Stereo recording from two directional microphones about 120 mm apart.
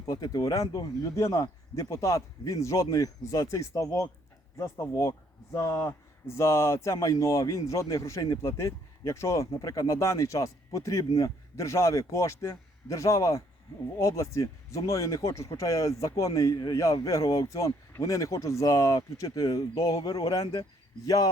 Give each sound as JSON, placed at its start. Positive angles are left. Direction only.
{"t": 0.0, "sound": "speech", "side_deg": 30}